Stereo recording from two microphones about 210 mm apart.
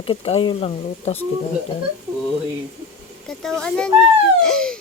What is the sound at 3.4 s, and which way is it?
Speech, centre (ahead or behind).